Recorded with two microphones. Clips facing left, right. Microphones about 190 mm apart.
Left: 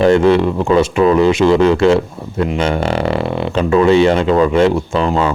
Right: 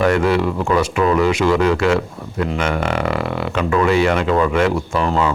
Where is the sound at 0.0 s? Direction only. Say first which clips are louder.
Left 5 dB; 25° left (ahead or behind).